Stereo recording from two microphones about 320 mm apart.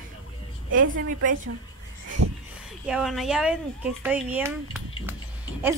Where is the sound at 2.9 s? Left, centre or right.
Centre.